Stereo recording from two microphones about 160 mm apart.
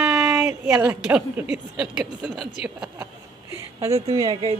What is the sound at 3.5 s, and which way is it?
Speech, 20° right (ahead or behind).